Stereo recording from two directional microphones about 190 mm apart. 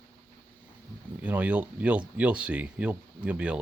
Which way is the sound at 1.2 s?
5° right (ahead or behind).